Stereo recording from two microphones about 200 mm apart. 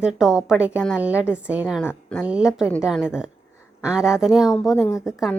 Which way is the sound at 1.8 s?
10° left (ahead or behind).